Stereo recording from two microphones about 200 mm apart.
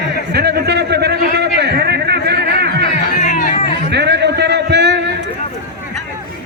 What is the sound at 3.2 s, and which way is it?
Music, 40° left (ahead or behind).